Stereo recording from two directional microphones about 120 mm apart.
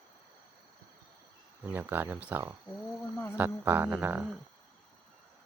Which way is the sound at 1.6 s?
15° right (ahead or behind).